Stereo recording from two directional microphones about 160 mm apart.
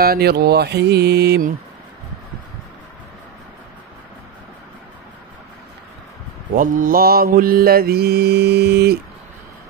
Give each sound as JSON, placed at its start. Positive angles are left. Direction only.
{"t": 0.0, "sound": "mantra", "side_deg": -75}
{"t": 6.5, "sound": "mantra", "side_deg": -55}